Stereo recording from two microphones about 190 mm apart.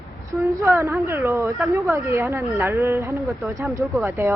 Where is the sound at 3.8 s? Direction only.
Centre (ahead or behind).